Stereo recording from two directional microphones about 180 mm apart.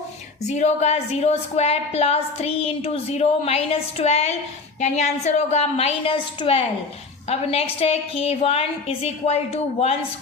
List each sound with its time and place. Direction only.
0.4 s a woman's voice: 40° left (ahead or behind)